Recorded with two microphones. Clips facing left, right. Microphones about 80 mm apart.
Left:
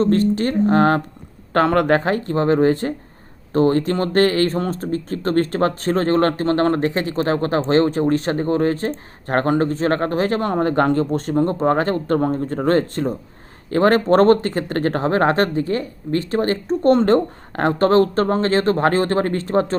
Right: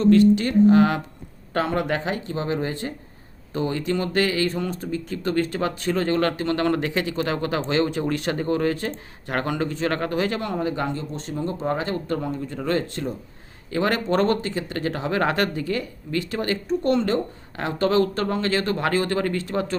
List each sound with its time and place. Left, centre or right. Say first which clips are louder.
0.0 s speech: right 1 dB; left
1.5 s speech: left 8 dB; left